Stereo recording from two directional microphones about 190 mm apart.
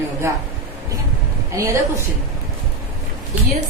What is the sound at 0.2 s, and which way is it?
Speech, 15° right (ahead or behind).